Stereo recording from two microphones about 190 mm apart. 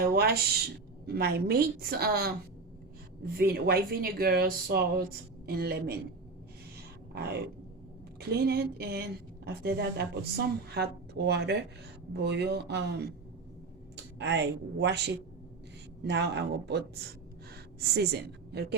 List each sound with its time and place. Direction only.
0.1 s a woman's voice: 55° right (ahead or behind)
3.3 s a woman's voice: 55° right (ahead or behind)
7.1 s a sound: 55° right (ahead or behind)
8.3 s a woman's voice: 55° right (ahead or behind)